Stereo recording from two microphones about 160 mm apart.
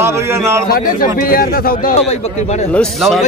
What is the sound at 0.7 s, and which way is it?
A man's voice, 65° left (ahead or behind).